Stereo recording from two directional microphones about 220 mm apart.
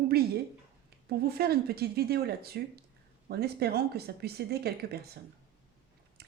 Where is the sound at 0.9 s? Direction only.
45° right (ahead or behind).